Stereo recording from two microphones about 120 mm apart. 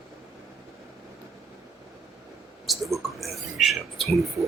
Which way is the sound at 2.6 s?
Centre (ahead or behind).